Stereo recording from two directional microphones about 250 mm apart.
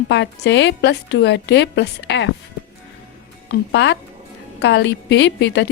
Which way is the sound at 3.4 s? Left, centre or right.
Left.